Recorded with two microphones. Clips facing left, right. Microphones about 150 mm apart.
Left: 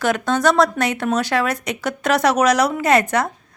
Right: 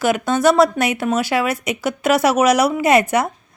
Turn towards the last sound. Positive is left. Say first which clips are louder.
# right 2 dB
turn(degrees=-10)  # may be behind; listen again after turning